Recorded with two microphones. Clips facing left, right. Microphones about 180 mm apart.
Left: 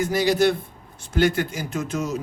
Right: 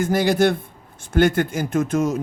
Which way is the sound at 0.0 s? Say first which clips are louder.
Right 2 dB; 50° right (ahead or behind).